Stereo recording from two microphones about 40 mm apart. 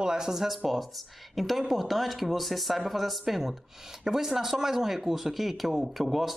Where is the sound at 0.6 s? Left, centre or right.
Centre.